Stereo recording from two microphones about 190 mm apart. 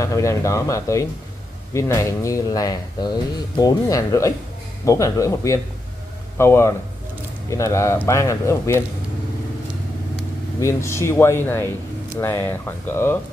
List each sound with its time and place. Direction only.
0.0 s speech: 15° left (ahead or behind)
10.6 s speech: 15° left (ahead or behind)